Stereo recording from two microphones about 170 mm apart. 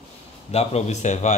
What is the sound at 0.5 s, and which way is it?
Speech, 40° left (ahead or behind).